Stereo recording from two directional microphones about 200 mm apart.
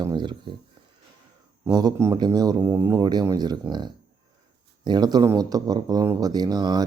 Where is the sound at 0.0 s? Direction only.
20° right (ahead or behind).